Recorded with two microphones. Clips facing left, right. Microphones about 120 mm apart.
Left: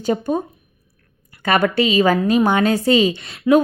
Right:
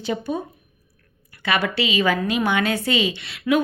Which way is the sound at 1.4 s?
45° left (ahead or behind).